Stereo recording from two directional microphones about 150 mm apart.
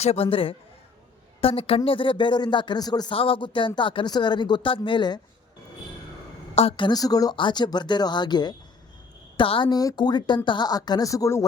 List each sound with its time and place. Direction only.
0.0 s speech: 40° left (ahead or behind)
6.6 s speech: 35° left (ahead or behind); by 11.4 s 20° left (ahead or behind)